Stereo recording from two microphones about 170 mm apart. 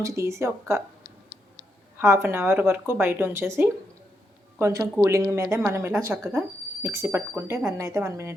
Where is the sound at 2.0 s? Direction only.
15° right (ahead or behind).